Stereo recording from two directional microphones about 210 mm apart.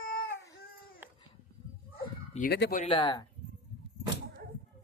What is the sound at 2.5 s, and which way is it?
Speech, 50° left (ahead or behind).